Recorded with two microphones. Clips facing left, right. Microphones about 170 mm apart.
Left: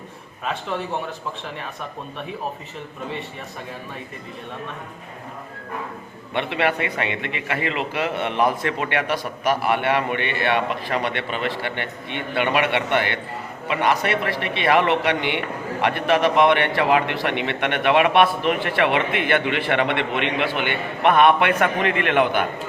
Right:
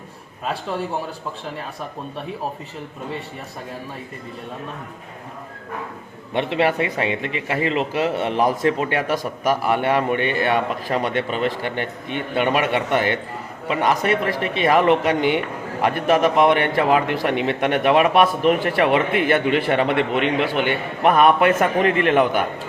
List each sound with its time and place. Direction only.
6.3 s a man's voice: 35° right (ahead or behind)